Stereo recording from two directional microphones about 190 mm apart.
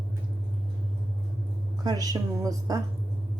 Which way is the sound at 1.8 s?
20° right (ahead or behind).